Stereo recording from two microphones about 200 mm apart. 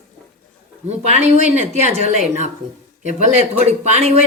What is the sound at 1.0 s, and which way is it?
Speech, 35° right (ahead or behind).